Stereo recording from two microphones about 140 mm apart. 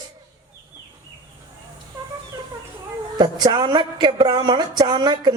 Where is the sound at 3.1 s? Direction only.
30° right (ahead or behind).